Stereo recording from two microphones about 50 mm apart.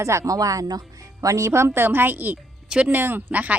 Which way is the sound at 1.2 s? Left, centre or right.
Right.